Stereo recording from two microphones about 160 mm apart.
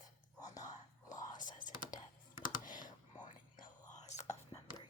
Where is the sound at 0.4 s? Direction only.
50° left (ahead or behind).